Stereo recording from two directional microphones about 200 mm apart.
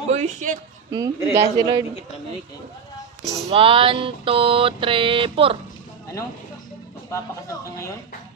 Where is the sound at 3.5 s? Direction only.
25° right (ahead or behind).